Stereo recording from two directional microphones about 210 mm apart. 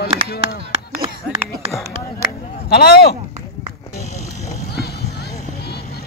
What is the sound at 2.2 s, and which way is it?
Speech, 50° left (ahead or behind).